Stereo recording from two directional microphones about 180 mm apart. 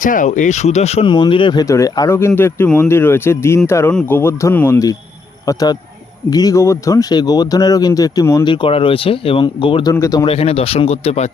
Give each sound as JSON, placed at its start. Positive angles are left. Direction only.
{"t": 0.0, "sound": "speech", "side_deg": 45}
{"t": 9.9, "sound": "speech", "side_deg": 20}
{"t": 10.3, "sound": "speech", "side_deg": 30}